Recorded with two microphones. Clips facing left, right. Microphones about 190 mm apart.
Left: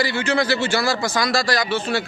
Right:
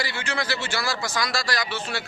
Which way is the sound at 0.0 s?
30° left (ahead or behind).